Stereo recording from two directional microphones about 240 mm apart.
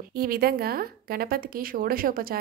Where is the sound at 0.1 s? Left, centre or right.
Right.